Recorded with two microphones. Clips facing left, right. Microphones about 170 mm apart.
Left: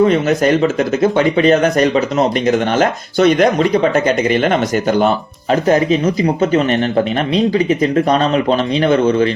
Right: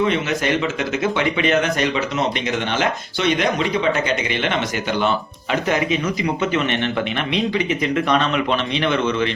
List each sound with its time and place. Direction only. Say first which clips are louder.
0.0 s speech: left 8 dB; 40° left (ahead or behind)